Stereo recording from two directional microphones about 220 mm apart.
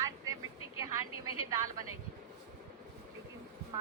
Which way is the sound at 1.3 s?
90° right.